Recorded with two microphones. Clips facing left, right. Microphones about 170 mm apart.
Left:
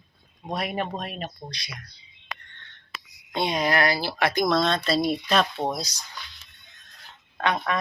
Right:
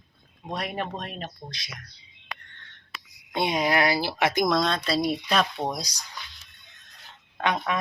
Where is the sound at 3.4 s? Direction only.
15° right (ahead or behind).